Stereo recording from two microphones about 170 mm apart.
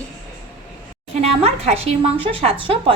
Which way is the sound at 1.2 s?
35° right (ahead or behind).